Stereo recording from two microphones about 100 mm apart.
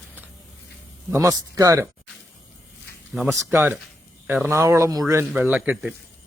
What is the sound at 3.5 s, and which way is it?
A man's voice, 20° right (ahead or behind).